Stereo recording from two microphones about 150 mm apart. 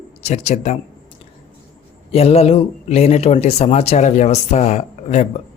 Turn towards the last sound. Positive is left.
turn(degrees=50)  # may be behind; listen again after turning